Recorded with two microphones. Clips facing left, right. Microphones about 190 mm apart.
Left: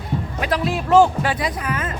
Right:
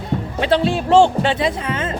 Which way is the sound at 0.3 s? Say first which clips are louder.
Right 6 dB; 30° right (ahead or behind).